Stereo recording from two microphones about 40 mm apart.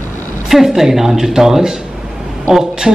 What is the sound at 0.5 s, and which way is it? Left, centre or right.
A man's voice, centre.